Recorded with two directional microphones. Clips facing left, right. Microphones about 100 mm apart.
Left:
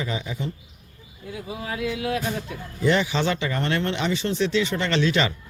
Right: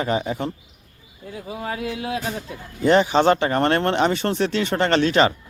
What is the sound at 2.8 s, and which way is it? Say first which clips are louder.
Speech: right 6 dB; 40° right (ahead or behind).